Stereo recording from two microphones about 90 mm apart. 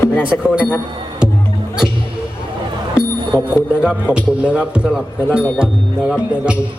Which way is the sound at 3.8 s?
10° right (ahead or behind).